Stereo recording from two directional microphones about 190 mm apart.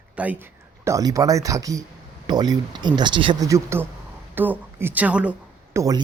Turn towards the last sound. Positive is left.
turn(degrees=-15)  # may be behind; listen again after turning